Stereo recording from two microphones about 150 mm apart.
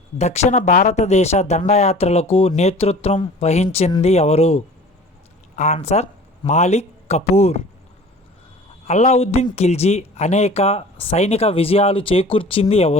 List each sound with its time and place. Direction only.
0.2 s speech: 50° left (ahead or behind)
8.9 s speech: 45° left (ahead or behind)